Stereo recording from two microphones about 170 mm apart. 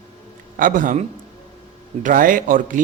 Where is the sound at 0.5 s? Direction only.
50° right (ahead or behind).